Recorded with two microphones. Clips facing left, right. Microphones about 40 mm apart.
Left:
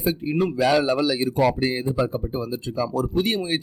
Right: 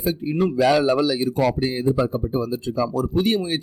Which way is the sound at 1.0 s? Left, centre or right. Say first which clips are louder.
Right 1 dB; left.